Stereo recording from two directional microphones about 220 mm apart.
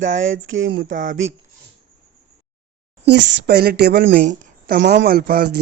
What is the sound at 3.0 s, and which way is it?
Speech, 50° right (ahead or behind).